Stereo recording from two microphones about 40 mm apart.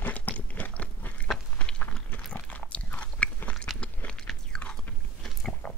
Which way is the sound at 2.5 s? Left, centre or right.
Left.